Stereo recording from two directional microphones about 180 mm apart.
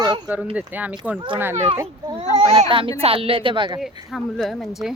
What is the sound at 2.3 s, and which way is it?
A child's voice, 35° right (ahead or behind).